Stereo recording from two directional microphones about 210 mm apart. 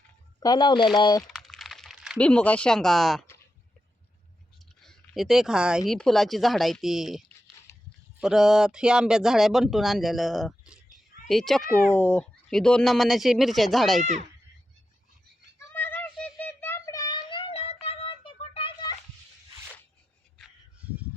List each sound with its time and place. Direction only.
0.3 s speech: 20° left (ahead or behind)
1.3 s a sound: centre (ahead or behind)
4.8 s speech: centre (ahead or behind)
8.2 s speech: centre (ahead or behind)
14.0 s speech: 35° right (ahead or behind)
15.7 s a sound: 10° left (ahead or behind)